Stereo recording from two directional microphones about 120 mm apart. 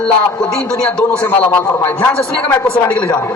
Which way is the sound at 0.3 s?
10° left (ahead or behind).